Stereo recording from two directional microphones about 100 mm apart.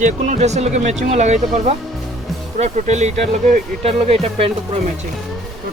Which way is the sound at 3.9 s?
85° right.